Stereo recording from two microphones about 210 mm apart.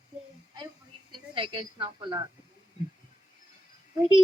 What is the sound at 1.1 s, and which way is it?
A woman's voice, 25° right (ahead or behind).